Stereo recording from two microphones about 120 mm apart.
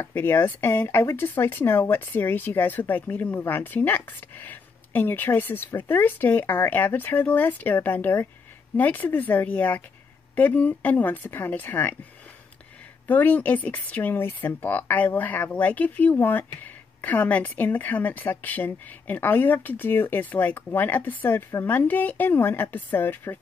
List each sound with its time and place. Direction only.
0.0 s speech: 20° left (ahead or behind)
13.0 s speech: 15° left (ahead or behind)